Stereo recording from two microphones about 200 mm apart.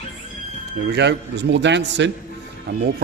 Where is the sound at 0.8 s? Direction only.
60° right (ahead or behind).